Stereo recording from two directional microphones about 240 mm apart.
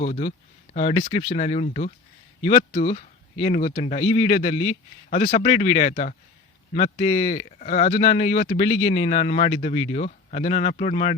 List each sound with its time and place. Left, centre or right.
0.0 s speech: left